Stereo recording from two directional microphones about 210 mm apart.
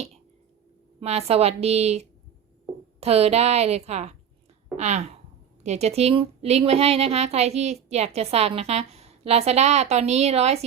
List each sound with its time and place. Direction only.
0.9 s a woman's voice: 30° right (ahead or behind)